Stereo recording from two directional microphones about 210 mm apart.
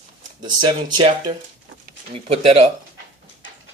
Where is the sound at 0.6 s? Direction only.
20° right (ahead or behind).